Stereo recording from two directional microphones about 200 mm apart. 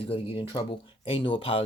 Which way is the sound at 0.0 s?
25° left (ahead or behind).